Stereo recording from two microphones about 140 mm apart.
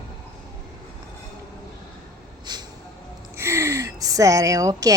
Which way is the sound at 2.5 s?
30° right (ahead or behind).